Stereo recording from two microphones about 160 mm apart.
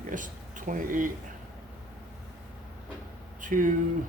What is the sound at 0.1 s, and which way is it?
Speech, 55° right (ahead or behind).